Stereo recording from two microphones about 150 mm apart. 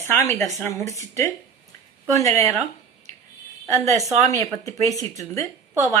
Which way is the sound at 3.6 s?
20° left (ahead or behind).